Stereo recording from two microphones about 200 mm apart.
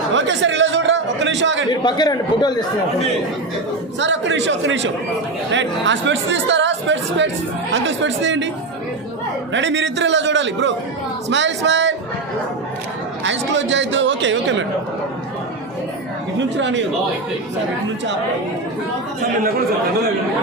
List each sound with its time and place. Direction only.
0.1 s a sound: 65° right (ahead or behind)
1.8 s a man's voice: 20° left (ahead or behind)
4.0 s a man's voice: 65° right (ahead or behind)
9.5 s a man's voice: 65° right (ahead or behind)
13.2 s a man's voice: 65° right (ahead or behind)
16.4 s a man's voice: 65° right (ahead or behind)